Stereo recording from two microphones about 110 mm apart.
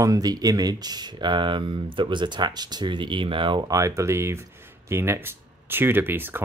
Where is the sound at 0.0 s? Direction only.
35° right (ahead or behind); by 3.6 s 50° right (ahead or behind).